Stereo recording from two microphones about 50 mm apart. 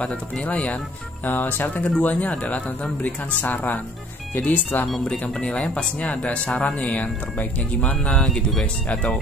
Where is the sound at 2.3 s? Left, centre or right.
Left.